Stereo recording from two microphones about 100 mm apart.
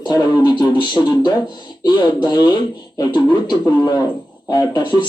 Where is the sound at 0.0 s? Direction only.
45° left (ahead or behind).